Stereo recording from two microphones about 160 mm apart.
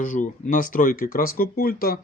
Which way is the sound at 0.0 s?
55° left (ahead or behind).